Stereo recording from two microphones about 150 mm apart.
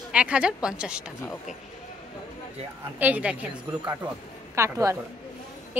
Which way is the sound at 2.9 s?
10° right (ahead or behind).